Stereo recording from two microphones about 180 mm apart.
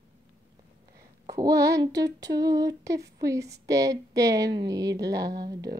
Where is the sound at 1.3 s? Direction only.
20° right (ahead or behind).